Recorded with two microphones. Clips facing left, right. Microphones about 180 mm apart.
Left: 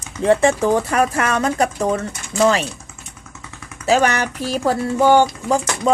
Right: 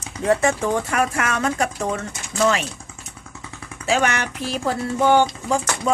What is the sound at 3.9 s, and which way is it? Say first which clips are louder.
Speech: left 4 dB; 40° left (ahead or behind).